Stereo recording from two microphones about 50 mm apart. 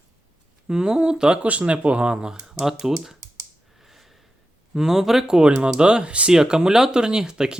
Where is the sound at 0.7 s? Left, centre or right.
Centre.